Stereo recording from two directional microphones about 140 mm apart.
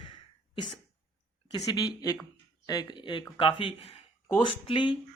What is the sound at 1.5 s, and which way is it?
Speech, 25° left (ahead or behind).